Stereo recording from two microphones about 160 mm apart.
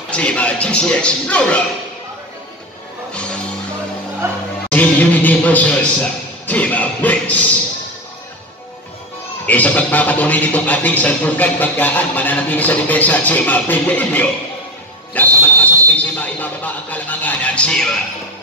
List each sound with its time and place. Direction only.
0.1 s speech: 5° left (ahead or behind)
3.1 s music: 5° left (ahead or behind)
4.2 s music: 15° right (ahead or behind)
4.6 s music: 10° left (ahead or behind)
6.4 s a sound: 10° left (ahead or behind)
9.5 s speech: 10° left (ahead or behind)
15.1 s a sound: 10° left (ahead or behind)